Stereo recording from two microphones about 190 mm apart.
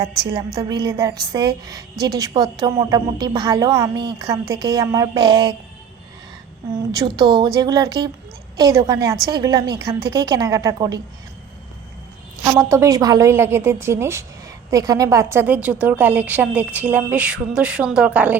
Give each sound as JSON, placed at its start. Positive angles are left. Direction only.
{"t": 0.6, "sound": "a woman's voice", "side_deg": -25}
{"t": 6.9, "sound": "a woman's voice", "side_deg": -20}
{"t": 12.4, "sound": "a woman's voice", "side_deg": -15}